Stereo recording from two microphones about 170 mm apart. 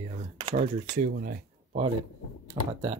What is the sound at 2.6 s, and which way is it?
Speech, 20° right (ahead or behind).